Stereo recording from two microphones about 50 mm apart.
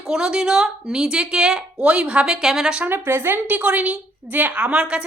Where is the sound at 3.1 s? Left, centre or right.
Right.